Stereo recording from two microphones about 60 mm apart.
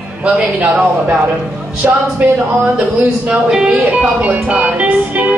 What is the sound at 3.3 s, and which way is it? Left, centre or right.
Speech, centre.